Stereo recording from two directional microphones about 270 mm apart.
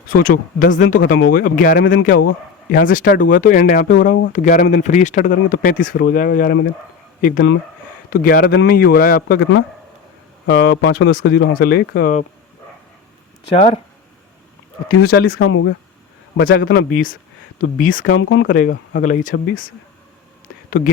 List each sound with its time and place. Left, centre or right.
0.1 s speech: left
0.8 s speech: left
1.0 s speech: left
1.8 s speech: left
2.7 s speech: left
13.5 s speech: left
14.9 s speech: left
16.4 s speech: left
17.9 s speech: left
18.4 s speech: left